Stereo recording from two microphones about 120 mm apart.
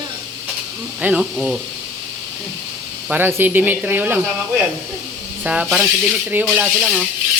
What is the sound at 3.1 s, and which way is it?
Speech, 15° right (ahead or behind).